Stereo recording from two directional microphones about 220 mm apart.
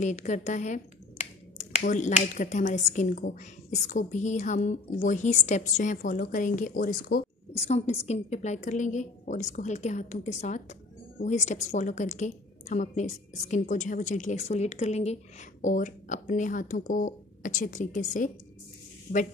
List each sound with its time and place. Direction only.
0.0 s speech: 35° left (ahead or behind)